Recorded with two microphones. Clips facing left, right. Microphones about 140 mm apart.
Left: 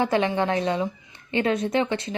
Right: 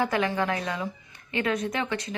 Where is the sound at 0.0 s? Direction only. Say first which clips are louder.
Left 3 dB; 25° left (ahead or behind).